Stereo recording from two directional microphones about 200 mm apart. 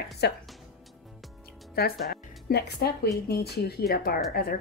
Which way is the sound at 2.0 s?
50° left (ahead or behind).